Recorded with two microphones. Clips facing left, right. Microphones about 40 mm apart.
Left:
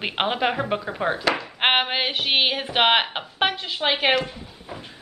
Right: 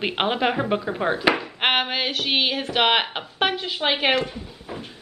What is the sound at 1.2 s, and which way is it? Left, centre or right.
Speech, centre.